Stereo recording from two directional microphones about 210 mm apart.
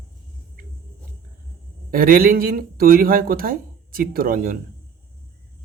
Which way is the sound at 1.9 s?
45° right (ahead or behind).